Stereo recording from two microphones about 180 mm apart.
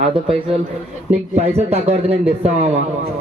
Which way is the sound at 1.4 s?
35° right (ahead or behind).